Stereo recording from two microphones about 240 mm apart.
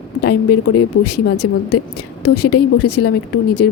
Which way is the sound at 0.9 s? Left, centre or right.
Left.